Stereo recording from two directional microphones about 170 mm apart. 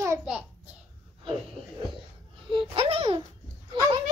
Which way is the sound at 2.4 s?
30° right (ahead or behind).